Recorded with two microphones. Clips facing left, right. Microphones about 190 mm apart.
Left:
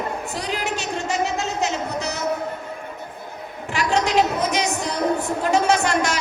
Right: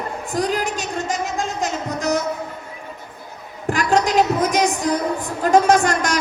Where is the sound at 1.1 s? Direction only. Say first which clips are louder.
Left 3 dB; 50° right (ahead or behind).